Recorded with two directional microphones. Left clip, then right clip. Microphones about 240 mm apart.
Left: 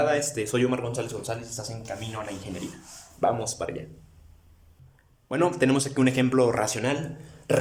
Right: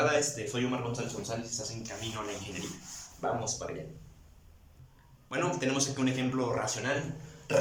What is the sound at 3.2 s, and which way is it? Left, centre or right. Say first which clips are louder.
Speech: left 8 dB; left.